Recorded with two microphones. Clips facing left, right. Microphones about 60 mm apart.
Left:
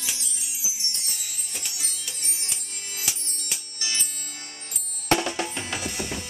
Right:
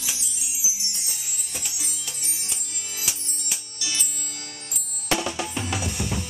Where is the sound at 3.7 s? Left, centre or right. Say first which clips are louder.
Even; left.